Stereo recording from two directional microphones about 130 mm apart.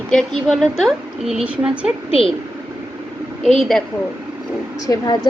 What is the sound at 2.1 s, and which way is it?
Speech, 45° left (ahead or behind).